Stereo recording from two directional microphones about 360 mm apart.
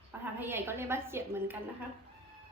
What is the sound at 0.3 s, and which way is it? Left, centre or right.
A woman's voice, centre.